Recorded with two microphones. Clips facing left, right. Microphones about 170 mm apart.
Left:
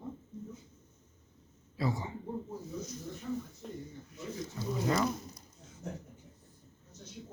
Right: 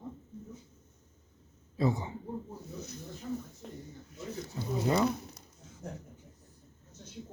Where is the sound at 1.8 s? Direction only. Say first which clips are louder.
Right 4 dB; 20° right (ahead or behind).